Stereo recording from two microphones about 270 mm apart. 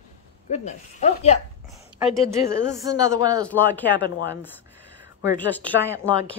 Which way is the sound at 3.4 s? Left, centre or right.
Centre.